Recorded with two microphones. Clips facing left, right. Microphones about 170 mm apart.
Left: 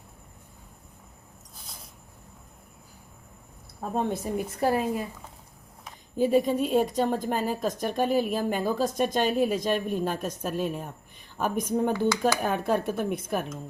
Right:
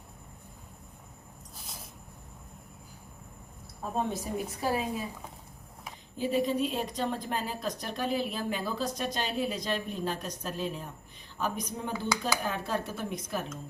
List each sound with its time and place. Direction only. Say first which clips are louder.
4.6 s speech: left 6 dB; 55° left (ahead or behind)
6.1 s a woman's voice: left 6 dB; 45° left (ahead or behind)